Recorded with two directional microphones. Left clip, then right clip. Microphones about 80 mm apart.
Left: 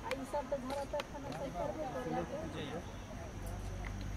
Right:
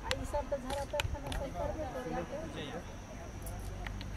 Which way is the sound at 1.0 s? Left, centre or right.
Right.